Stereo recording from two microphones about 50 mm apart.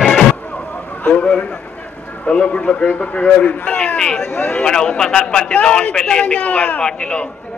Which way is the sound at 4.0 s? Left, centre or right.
Centre.